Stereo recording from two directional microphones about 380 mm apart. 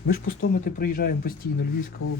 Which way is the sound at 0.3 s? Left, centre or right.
Left.